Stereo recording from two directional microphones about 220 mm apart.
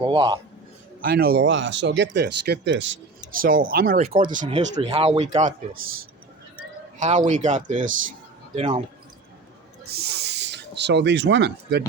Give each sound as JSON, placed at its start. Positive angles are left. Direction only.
{"t": 0.0, "sound": "a man's voice", "side_deg": -20}
{"t": 1.0, "sound": "speech", "side_deg": -45}
{"t": 3.3, "sound": "speech", "side_deg": -40}
{"t": 7.3, "sound": "speech", "side_deg": -35}
{"t": 8.5, "sound": "a man's voice", "side_deg": -20}
{"t": 9.9, "sound": "speech", "side_deg": -45}